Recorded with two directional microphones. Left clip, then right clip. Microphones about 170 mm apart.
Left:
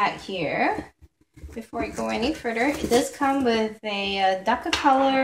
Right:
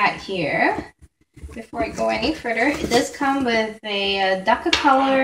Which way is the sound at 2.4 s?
40° left (ahead or behind).